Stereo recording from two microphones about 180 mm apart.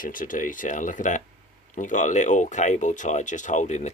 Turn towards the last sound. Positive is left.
turn(degrees=40)  # may be behind; listen again after turning